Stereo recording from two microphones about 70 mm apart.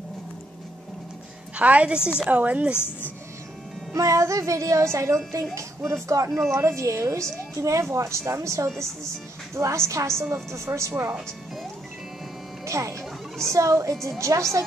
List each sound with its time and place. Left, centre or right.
1.6 s a woman's voice: centre
2.7 s speech: left
3.9 s a woman's voice: right
12.6 s music: right
13.5 s a woman's voice: right